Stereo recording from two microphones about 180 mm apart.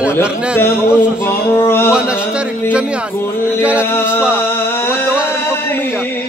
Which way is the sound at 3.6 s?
5° right (ahead or behind).